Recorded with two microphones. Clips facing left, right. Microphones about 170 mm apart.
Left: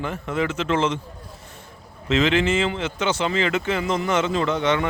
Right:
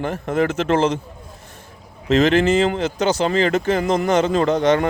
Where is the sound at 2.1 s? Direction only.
40° right (ahead or behind).